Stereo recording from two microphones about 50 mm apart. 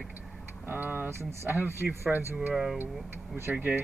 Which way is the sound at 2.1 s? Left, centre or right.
Right.